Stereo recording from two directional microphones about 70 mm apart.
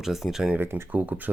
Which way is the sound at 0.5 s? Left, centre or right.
Right.